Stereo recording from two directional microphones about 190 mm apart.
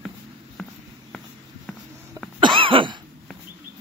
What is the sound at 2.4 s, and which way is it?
Cough, 25° right (ahead or behind).